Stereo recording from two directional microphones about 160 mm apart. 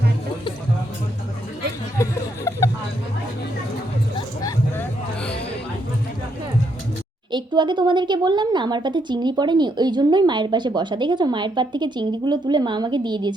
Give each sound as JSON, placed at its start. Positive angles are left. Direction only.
{"t": 2.0, "sound": "a sound", "side_deg": 20}
{"t": 4.4, "sound": "hubbub", "side_deg": 20}
{"t": 7.3, "sound": "speech", "side_deg": -30}